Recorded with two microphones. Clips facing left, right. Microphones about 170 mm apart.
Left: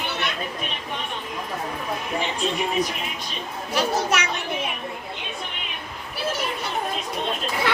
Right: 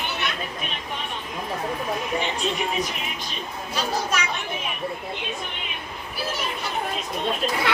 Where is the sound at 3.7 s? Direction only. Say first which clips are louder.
Left 4 dB; 70° left (ahead or behind).